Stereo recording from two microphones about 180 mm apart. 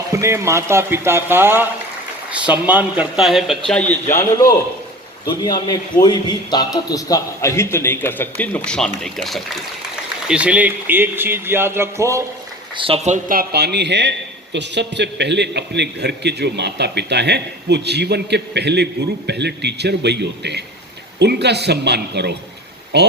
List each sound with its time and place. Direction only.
0.1 s a man's voice: 15° right (ahead or behind)
12.7 s speech: 30° right (ahead or behind)
13.2 s a man's voice: 55° right (ahead or behind)